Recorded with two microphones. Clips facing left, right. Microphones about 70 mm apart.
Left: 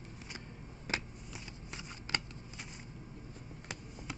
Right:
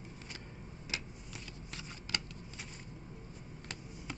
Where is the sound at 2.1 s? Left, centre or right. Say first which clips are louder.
Left 3 dB; left.